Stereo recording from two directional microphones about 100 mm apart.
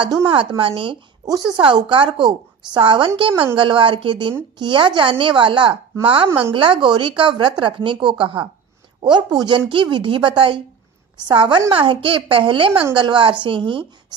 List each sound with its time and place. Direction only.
0.3 s a woman's voice: 65° right (ahead or behind)
1.2 s a woman's voice: 40° right (ahead or behind)
11.7 s a woman's voice: 60° right (ahead or behind)